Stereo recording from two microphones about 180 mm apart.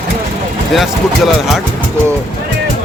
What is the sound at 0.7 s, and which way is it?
Speech, centre (ahead or behind).